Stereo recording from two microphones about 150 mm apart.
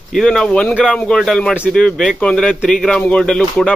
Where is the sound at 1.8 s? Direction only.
5° left (ahead or behind).